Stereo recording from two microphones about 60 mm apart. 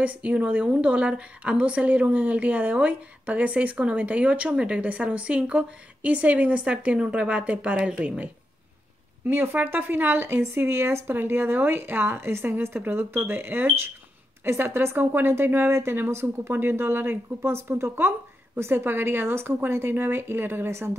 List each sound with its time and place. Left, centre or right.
0.0 s a woman's voice: right
9.3 s a woman's voice: right